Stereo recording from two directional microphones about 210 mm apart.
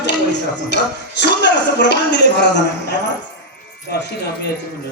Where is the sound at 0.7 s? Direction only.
55° left (ahead or behind).